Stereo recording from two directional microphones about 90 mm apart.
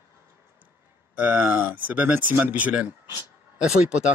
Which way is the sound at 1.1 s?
15° right (ahead or behind).